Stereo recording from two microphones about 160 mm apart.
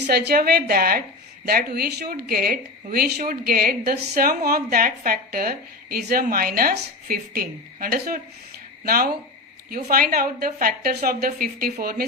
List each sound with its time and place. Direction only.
0.1 s a woman's voice: 85° right; by 12.0 s 70° right (ahead or behind)